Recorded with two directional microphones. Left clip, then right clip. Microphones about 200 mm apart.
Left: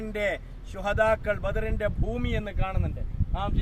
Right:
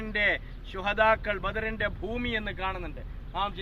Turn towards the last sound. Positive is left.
turn(degrees=55)  # may be behind; listen again after turning